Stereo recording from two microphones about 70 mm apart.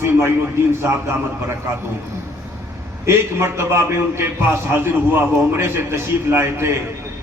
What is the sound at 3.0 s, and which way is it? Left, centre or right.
A man's voice, right.